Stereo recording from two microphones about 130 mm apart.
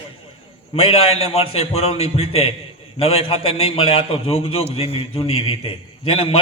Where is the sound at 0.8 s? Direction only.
50° left (ahead or behind).